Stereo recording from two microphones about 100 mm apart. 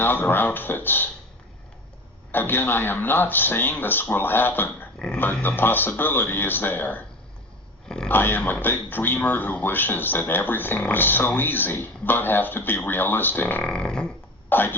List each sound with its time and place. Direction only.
0.0 s speech: 20° left (ahead or behind)
2.3 s speech: 20° left (ahead or behind)
4.9 s a sound: 10° left (ahead or behind)
5.2 s speech: 20° left (ahead or behind)
7.9 s a sound: 10° left (ahead or behind)
8.1 s speech: 20° left (ahead or behind)
14.5 s speech: 20° left (ahead or behind)